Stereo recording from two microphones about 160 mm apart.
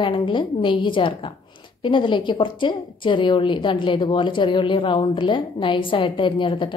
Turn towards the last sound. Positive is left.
turn(degrees=30)  # may be behind; listen again after turning